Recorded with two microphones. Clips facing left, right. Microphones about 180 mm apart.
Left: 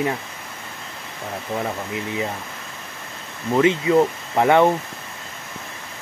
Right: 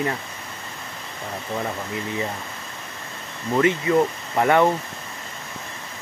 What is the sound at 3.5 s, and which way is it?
Speech, 20° left (ahead or behind).